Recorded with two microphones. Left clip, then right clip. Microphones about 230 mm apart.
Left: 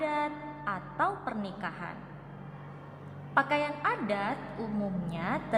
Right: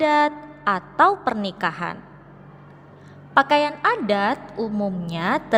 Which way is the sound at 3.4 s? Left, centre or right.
Right.